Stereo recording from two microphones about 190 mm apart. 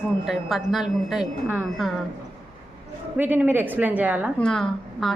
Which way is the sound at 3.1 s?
10° right (ahead or behind).